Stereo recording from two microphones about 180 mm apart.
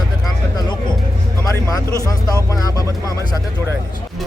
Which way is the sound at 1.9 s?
20° left (ahead or behind).